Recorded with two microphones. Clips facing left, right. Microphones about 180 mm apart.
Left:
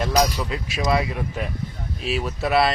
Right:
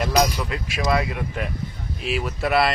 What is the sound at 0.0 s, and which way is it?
Speech, centre (ahead or behind).